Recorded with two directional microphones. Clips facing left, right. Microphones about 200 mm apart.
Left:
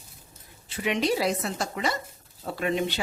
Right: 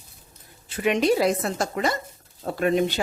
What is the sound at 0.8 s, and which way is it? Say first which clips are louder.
A woman's voice: right 5 dB; 50° right (ahead or behind).